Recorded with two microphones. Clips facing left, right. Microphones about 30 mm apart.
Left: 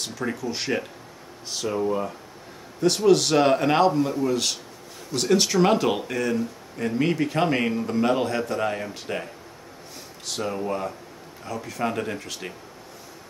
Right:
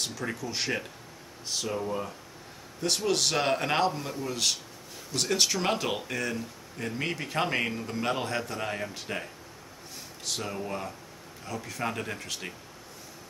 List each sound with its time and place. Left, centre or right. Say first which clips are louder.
0.0 s speech: left 5 dB; centre
1.8 s speech: left 7 dB; centre